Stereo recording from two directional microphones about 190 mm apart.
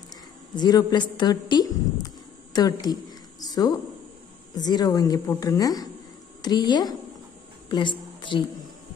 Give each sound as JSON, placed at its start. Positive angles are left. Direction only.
{"t": 0.6, "sound": "a woman's voice", "side_deg": 20}